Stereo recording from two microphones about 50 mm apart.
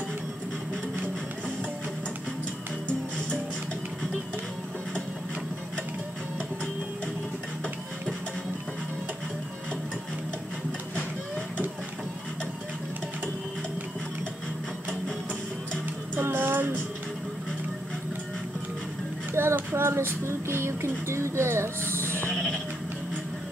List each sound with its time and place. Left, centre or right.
16.2 s music: right
19.4 s child singing: right
19.7 s music: right
22.3 s sheep: centre